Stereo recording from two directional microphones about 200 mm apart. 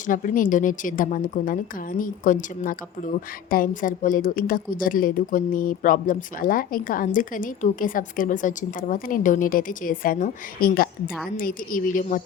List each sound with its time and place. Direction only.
0.1 s a woman's voice: 40° left (ahead or behind)